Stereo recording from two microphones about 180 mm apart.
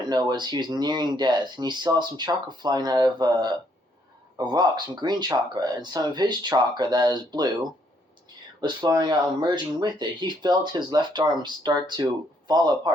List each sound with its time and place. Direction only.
0.0 s speech: 25° right (ahead or behind)